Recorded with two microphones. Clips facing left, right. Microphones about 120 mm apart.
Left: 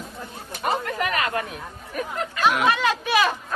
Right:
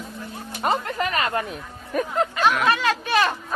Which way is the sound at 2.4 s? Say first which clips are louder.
Left 2 dB; 10° left (ahead or behind).